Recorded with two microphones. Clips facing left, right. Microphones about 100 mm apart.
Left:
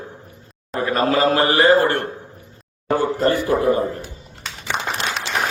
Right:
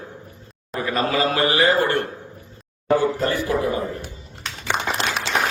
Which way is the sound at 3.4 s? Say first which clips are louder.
Left 4 dB; 45° left (ahead or behind).